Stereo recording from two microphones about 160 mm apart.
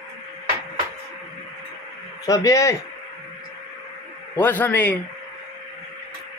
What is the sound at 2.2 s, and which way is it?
Speech, 20° left (ahead or behind).